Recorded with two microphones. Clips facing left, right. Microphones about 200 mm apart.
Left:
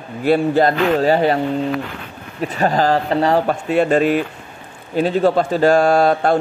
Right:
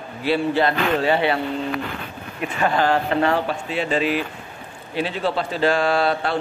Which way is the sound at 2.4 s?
40° left (ahead or behind).